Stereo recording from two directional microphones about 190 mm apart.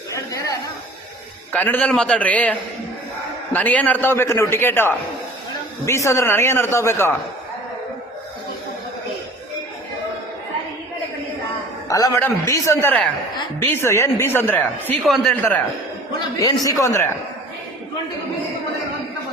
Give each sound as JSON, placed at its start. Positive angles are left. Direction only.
{"t": 0.1, "sound": "chatter", "side_deg": 15}
{"t": 1.5, "sound": "a man's voice", "side_deg": 10}
{"t": 11.9, "sound": "a man's voice", "side_deg": 20}
{"t": 16.4, "sound": "a man's voice", "side_deg": 20}